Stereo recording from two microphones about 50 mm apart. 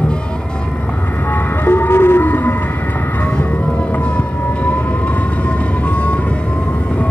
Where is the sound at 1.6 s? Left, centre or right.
Left.